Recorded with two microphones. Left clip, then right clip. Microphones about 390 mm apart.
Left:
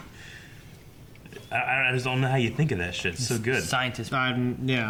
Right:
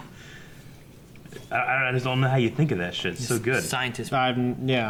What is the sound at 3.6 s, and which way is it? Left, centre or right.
Speech, left.